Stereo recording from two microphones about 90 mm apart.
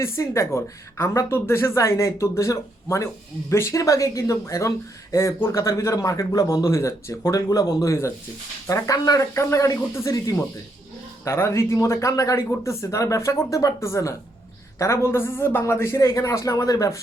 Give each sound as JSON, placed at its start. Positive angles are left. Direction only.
{"t": 0.0, "sound": "a woman's voice", "side_deg": 35}